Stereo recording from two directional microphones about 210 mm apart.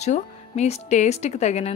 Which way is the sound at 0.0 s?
30° left (ahead or behind).